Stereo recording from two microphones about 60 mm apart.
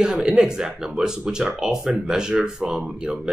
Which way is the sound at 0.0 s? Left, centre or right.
Centre.